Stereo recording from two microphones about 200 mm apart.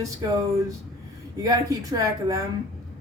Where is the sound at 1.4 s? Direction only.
20° right (ahead or behind).